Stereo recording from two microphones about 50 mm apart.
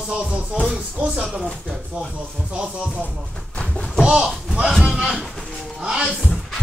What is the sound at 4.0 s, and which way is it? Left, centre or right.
Speech, centre.